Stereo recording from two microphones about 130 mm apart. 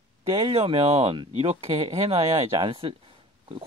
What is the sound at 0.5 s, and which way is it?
Speech, 50° right (ahead or behind).